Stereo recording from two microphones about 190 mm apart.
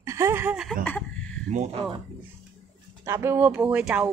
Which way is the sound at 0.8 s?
10° left (ahead or behind).